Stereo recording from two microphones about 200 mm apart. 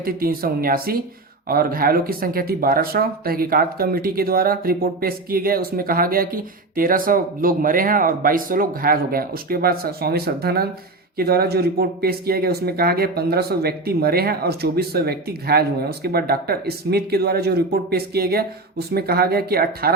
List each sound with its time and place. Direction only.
0.0 s speech: 45° right (ahead or behind)